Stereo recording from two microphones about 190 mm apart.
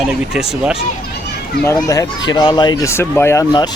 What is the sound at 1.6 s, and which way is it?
Speech, 10° left (ahead or behind).